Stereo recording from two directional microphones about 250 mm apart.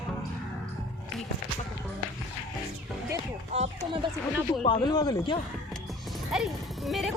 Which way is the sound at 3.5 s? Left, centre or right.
Right.